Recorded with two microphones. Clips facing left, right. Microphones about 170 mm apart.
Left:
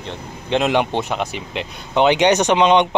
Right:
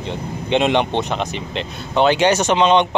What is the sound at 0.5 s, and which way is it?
Speech, 5° left (ahead or behind).